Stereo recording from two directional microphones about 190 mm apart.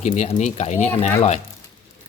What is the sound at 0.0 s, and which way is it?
Speech, 35° left (ahead or behind).